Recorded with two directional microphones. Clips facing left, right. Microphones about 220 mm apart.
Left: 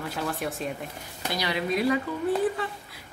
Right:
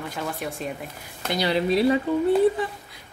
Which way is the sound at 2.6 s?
15° right (ahead or behind).